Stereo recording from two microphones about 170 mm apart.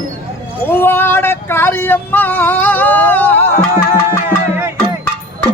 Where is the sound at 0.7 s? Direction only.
10° left (ahead or behind).